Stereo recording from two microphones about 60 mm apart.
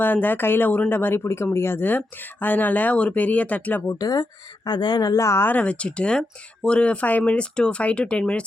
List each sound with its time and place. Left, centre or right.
0.0 s speech: left
4.0 s speech: left
4.9 s speech: left
5.4 s speech: left